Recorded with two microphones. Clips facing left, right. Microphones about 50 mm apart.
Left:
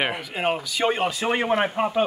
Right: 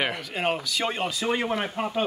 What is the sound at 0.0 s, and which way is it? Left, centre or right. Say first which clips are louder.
Speech: left 2 dB; centre.